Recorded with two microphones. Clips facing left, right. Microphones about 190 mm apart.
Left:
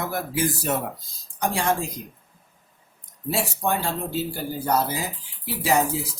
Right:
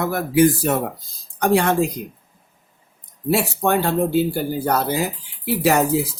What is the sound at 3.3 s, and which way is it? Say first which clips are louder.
Speech: right 6 dB; 65° right (ahead or behind).